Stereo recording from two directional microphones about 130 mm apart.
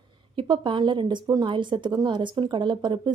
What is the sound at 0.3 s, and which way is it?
Speech, 40° right (ahead or behind).